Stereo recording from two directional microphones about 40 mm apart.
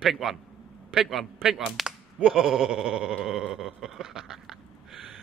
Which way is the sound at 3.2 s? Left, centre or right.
Centre.